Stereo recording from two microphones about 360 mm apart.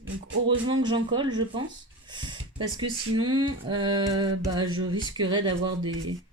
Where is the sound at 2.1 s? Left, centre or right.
Centre.